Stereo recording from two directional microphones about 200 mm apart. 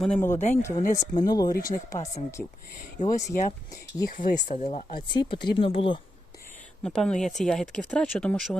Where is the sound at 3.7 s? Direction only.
15° left (ahead or behind).